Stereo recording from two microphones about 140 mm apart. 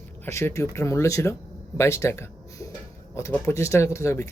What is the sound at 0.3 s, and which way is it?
Speech, 20° left (ahead or behind).